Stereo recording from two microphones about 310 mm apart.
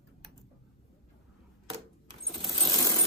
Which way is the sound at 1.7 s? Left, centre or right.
Centre.